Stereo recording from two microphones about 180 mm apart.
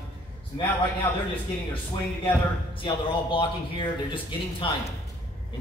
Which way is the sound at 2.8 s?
30° left (ahead or behind).